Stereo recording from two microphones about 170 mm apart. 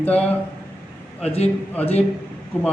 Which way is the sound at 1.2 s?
40° left (ahead or behind).